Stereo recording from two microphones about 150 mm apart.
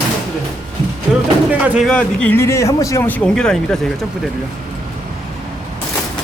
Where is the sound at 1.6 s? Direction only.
10° right (ahead or behind).